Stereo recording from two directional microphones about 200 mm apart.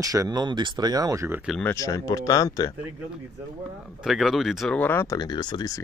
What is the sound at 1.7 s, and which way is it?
Speech, 15° left (ahead or behind).